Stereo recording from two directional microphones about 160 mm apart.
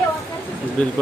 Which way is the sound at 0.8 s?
5° left (ahead or behind).